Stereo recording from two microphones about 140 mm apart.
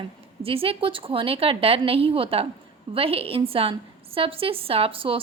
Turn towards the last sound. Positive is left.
turn(degrees=-40)  # may be behind; listen again after turning